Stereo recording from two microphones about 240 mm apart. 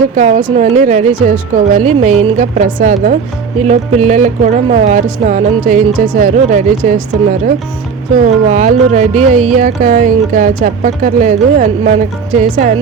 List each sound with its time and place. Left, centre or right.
0.2 s a woman's voice: right